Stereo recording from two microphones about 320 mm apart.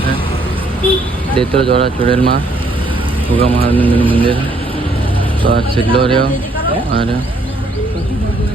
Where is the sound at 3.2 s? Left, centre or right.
Centre.